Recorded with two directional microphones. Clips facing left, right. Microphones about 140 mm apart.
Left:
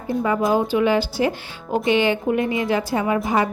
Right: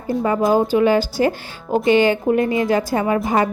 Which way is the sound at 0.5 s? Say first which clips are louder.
Right 4 dB; 40° right (ahead or behind).